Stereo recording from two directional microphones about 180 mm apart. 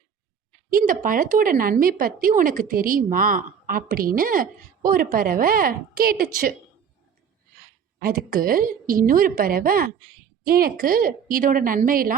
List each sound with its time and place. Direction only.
0.7 s speech: 50° right (ahead or behind)
7.9 s speech: 55° right (ahead or behind)